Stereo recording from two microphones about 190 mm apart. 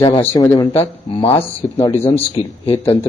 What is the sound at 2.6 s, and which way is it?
Speech, 25° left (ahead or behind).